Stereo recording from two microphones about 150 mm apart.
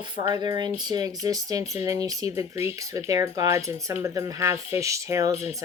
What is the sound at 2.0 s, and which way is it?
Speech, 20° right (ahead or behind).